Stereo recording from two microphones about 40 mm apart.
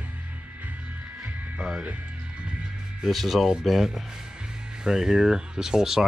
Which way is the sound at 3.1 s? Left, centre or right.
Centre.